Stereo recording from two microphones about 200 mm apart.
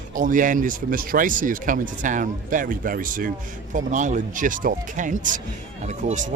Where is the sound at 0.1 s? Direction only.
40° right (ahead or behind).